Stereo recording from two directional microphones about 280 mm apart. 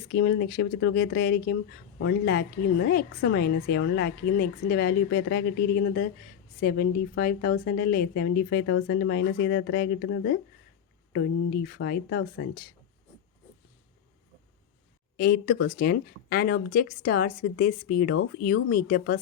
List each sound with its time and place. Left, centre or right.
0.1 s a woman's voice: left
8.6 s a woman's voice: left
15.1 s a woman's voice: left